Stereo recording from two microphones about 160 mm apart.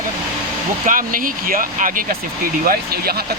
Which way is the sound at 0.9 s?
60° right (ahead or behind).